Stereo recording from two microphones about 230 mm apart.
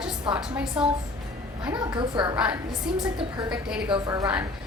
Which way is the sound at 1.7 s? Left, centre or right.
Centre.